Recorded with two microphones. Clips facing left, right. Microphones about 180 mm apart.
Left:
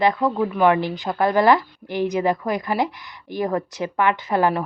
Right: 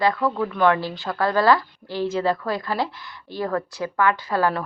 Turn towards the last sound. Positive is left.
turn(degrees=15)  # may be behind; listen again after turning